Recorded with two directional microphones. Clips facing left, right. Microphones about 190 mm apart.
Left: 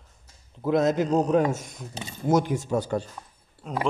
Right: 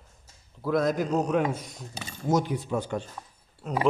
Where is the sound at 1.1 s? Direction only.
40° left (ahead or behind).